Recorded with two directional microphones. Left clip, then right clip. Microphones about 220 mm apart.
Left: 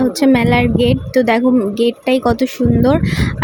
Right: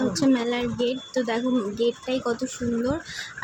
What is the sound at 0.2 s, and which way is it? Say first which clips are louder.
Speech: left 12 dB; 35° left (ahead or behind).